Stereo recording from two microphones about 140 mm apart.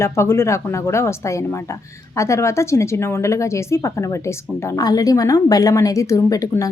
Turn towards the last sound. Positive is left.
turn(degrees=25)  # may be behind; listen again after turning